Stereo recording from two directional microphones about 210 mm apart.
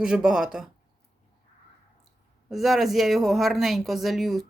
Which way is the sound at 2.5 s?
Centre (ahead or behind).